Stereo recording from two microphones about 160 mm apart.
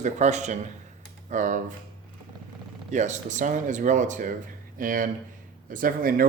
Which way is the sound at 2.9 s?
50° right (ahead or behind).